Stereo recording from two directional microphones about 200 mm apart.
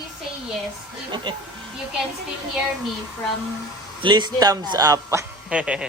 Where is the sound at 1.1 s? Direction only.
20° right (ahead or behind).